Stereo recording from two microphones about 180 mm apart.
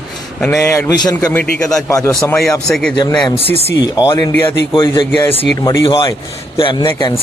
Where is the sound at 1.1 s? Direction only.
10° left (ahead or behind).